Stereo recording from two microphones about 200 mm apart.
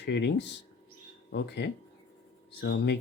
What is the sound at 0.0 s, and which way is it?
Speech, 60° left (ahead or behind).